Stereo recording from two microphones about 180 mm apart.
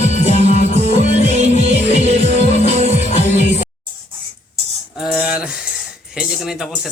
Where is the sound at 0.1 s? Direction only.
40° left (ahead or behind).